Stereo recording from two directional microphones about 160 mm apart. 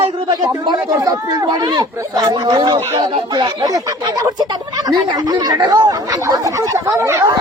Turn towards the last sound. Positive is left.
turn(degrees=-15)  # may be behind; listen again after turning